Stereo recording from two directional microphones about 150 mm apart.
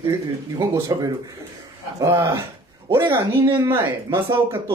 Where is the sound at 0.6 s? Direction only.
20° right (ahead or behind).